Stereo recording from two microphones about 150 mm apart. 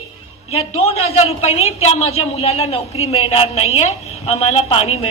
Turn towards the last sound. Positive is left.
turn(degrees=40)  # may be behind; listen again after turning